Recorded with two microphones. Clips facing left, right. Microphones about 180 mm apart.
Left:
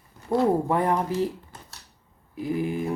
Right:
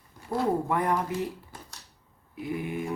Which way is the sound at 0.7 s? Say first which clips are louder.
Left 3 dB; 25° left (ahead or behind).